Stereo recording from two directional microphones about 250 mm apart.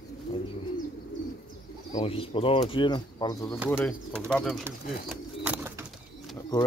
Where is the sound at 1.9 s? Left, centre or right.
Left.